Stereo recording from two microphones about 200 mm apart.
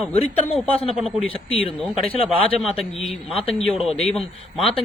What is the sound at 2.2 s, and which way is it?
A man's voice, centre (ahead or behind).